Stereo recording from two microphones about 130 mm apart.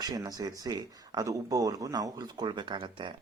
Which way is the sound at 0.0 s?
30° right (ahead or behind).